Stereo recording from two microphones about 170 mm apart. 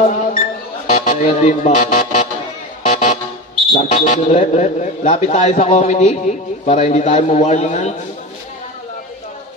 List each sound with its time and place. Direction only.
0.0 s music: 40° left (ahead or behind)
0.9 s speech: 45° left (ahead or behind)
2.9 s vehicle: 45° left (ahead or behind)
3.7 s a man's voice: 40° left (ahead or behind)